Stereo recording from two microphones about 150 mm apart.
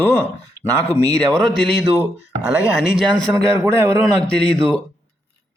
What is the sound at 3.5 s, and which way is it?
Speech, 20° right (ahead or behind).